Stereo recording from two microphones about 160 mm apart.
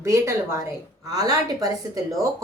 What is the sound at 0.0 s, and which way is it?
A woman's voice, 15° right (ahead or behind).